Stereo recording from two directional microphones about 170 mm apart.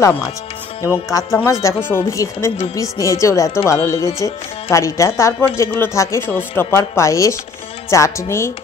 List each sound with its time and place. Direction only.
0.0 s speech: 15° left (ahead or behind)